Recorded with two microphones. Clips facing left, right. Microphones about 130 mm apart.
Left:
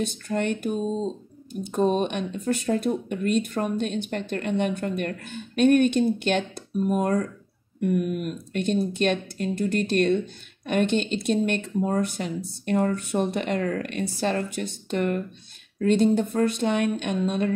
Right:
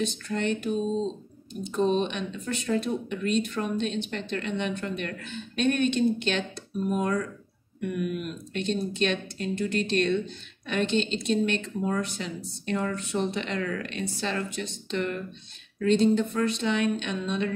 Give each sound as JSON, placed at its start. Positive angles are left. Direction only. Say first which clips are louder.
{"t": 0.0, "sound": "speech", "louder": "left 2 dB", "side_deg": 50}
{"t": 0.8, "sound": "speech", "louder": "left 1 dB", "side_deg": 5}
{"t": 1.5, "sound": "speech", "louder": "left 2 dB", "side_deg": 50}